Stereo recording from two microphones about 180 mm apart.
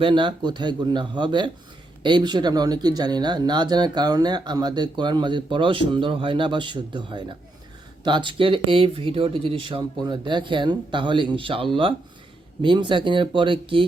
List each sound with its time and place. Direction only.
0.0 s speech: 25° right (ahead or behind)